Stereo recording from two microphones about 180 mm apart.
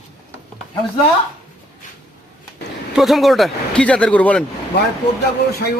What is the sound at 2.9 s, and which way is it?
Speech, centre (ahead or behind).